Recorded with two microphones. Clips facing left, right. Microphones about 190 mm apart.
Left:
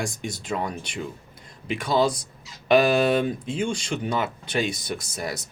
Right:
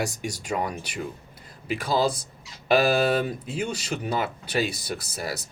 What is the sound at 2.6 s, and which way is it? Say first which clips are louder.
Speech: left 2 dB; 5° right (ahead or behind).